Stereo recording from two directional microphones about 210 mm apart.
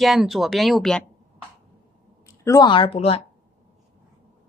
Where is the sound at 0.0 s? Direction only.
Centre (ahead or behind).